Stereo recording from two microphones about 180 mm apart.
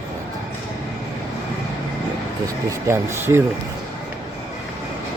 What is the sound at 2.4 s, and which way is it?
Speech, 15° right (ahead or behind).